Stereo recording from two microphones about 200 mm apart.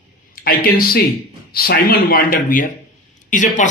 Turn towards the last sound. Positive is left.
turn(degrees=40)  # may be behind; listen again after turning